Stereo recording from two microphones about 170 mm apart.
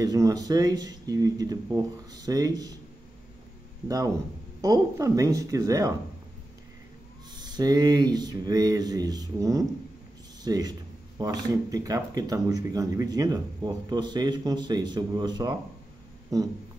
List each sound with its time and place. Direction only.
0.0 s speech: 20° right (ahead or behind)
4.6 s speech: 20° right (ahead or behind)
7.3 s speech: 25° right (ahead or behind)